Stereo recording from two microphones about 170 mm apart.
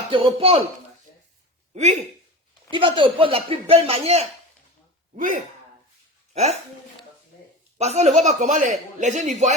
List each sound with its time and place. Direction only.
0.1 s speech: 35° right (ahead or behind)
1.7 s speech: 45° right (ahead or behind)
2.7 s speech: 30° right (ahead or behind)
5.1 s speech: 55° right (ahead or behind)
6.3 s speech: 40° right (ahead or behind)
7.8 s speech: 40° right (ahead or behind)